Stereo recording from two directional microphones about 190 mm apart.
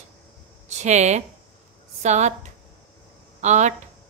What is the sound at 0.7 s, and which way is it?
Speech, 35° right (ahead or behind).